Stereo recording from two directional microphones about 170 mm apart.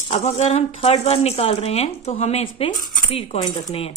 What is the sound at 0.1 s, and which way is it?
Speech, 40° left (ahead or behind).